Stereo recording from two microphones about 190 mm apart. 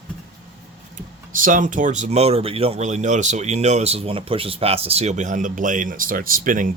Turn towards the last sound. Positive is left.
turn(degrees=-45)  # may be behind; listen again after turning